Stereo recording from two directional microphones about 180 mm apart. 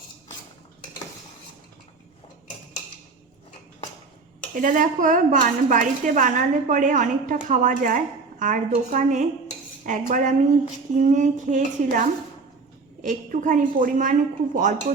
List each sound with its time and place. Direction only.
4.5 s a woman's voice: 45° right (ahead or behind)